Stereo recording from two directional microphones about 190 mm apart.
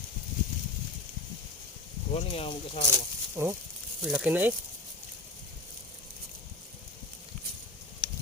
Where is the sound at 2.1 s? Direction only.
30° left (ahead or behind).